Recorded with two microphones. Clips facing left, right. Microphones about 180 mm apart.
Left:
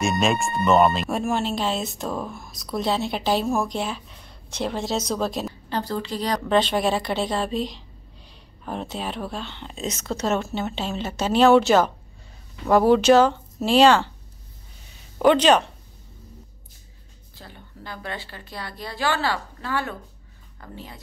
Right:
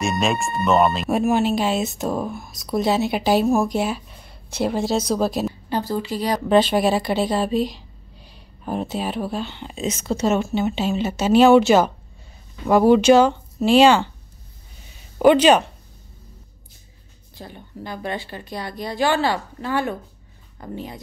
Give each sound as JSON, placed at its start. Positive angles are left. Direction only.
{"t": 0.0, "sound": "a woman's voice", "side_deg": 0}
{"t": 15.1, "sound": "speech", "side_deg": -5}
{"t": 17.4, "sound": "a woman's voice", "side_deg": -15}